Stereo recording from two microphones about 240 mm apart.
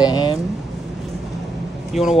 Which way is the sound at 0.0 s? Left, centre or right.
Centre.